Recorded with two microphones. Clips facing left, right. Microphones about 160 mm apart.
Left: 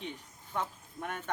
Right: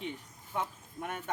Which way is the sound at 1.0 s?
10° right (ahead or behind).